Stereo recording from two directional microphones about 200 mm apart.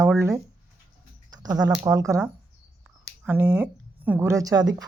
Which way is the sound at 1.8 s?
15° right (ahead or behind).